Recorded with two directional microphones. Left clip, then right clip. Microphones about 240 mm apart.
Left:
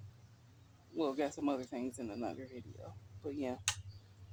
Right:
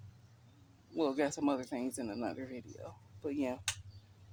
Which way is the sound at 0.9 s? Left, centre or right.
Right.